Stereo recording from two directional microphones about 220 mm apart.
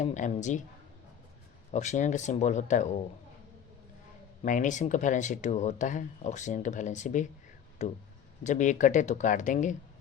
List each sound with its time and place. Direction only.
0.0 s speech: 35° left (ahead or behind)
1.7 s speech: 35° left (ahead or behind)
4.4 s speech: 35° left (ahead or behind)